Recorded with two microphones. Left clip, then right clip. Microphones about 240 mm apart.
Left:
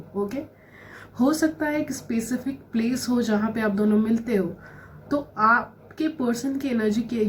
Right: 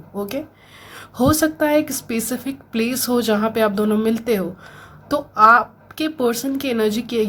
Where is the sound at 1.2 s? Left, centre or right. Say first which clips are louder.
Right 6 dB; right.